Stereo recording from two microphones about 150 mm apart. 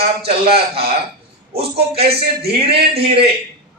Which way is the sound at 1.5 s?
90° right.